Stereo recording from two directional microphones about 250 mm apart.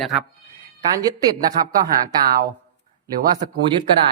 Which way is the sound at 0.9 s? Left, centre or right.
Centre.